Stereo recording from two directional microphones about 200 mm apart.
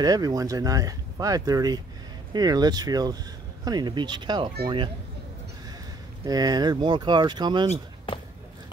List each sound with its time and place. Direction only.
0.0 s speech: 20° right (ahead or behind)
6.2 s speech: 20° right (ahead or behind)